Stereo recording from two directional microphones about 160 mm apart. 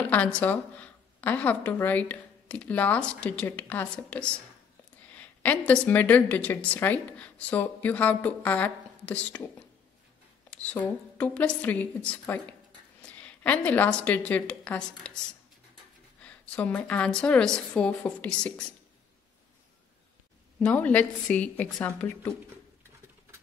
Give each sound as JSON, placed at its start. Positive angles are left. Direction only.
{"t": 0.1, "sound": "a woman's voice", "side_deg": 10}
{"t": 10.5, "sound": "a woman's voice", "side_deg": 10}
{"t": 16.2, "sound": "a woman's voice", "side_deg": 5}
{"t": 20.5, "sound": "a woman's voice", "side_deg": 10}